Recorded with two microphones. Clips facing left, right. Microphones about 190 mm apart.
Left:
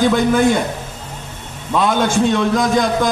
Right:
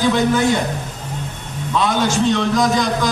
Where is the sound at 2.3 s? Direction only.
55° left (ahead or behind).